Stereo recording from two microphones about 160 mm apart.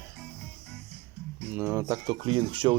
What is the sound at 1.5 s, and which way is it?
Speech, 10° right (ahead or behind).